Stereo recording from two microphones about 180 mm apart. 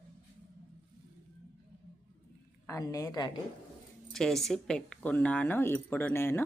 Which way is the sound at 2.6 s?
20° left (ahead or behind).